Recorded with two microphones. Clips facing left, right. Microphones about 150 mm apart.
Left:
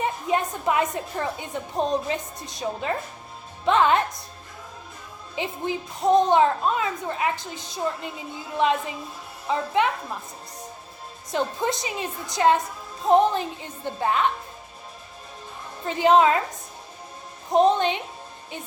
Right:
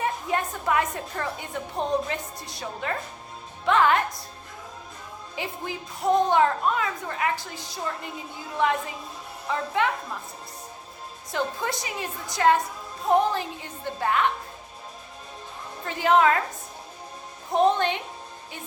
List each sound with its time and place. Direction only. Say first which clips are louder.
0.0 s a woman's voice: left 2 dB; 20° left (ahead or behind)
5.4 s a woman's voice: left 5 dB; 20° left (ahead or behind)
11.3 s a woman's voice: left 3 dB; 20° left (ahead or behind)
15.9 s a woman's voice: left 3 dB; 20° left (ahead or behind)
17.5 s a woman's voice: left 2 dB; 20° left (ahead or behind)